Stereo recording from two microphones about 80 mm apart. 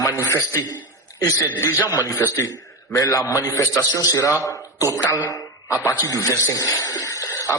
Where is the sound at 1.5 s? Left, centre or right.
Left.